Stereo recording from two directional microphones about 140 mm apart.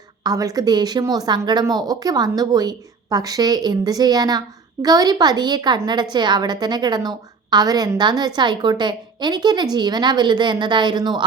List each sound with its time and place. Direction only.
0.2 s a woman's voice: 25° right (ahead or behind)